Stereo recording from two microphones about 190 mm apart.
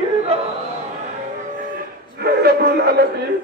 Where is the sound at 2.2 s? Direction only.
55° right (ahead or behind).